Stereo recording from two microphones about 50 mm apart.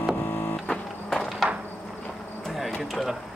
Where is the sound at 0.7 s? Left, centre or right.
Centre.